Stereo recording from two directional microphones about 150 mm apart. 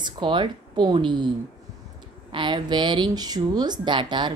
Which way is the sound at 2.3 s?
30° right (ahead or behind).